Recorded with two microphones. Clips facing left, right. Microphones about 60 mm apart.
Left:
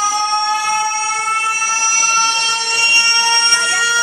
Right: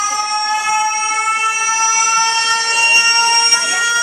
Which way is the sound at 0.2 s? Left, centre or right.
Right.